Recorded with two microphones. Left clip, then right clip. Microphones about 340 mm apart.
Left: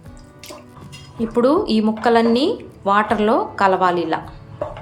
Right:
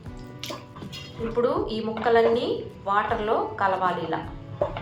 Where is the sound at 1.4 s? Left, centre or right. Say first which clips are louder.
Left 8 dB; left.